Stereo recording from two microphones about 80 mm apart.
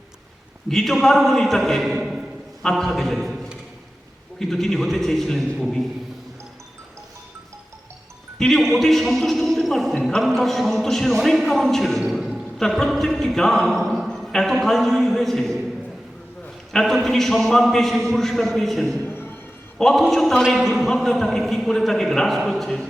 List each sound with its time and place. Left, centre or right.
0.7 s a man's voice: centre
4.4 s a man's voice: centre
8.4 s a man's voice: centre
16.7 s a man's voice: centre
19.0 s a sound: left
19.8 s a man's voice: centre